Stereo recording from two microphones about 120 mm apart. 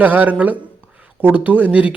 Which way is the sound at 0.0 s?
15° right (ahead or behind).